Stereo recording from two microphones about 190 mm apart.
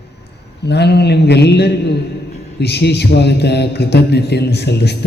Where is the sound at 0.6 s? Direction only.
60° left (ahead or behind).